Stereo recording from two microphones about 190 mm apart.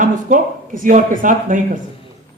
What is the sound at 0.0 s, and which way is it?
A man's voice, 45° right (ahead or behind).